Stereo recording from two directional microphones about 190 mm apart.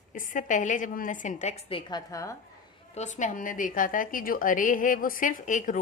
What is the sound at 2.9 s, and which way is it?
A woman's voice, 40° left (ahead or behind).